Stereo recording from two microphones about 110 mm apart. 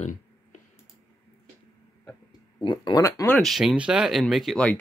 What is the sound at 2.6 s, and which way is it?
Speech, 40° left (ahead or behind).